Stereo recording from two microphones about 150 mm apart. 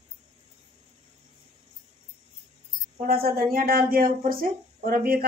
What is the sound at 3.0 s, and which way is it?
Speech, 85° right.